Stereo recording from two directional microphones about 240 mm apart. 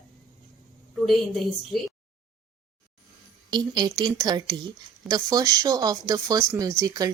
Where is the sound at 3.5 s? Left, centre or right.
Centre.